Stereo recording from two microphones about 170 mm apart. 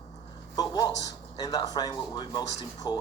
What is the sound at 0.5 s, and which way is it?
Speech, 25° left (ahead or behind).